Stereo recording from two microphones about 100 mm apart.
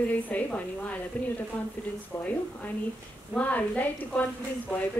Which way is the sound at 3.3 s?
15° left (ahead or behind).